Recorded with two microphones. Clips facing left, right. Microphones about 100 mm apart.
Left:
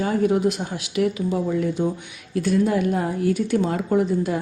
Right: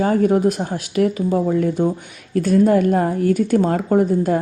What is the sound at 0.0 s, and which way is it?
A woman's voice, 45° right (ahead or behind).